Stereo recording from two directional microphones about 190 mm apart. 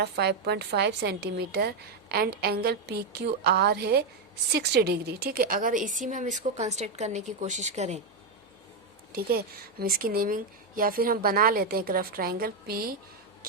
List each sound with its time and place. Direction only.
0.0 s a woman's voice: 60° right (ahead or behind); by 8.0 s 35° right (ahead or behind)
9.1 s speech: 50° right (ahead or behind)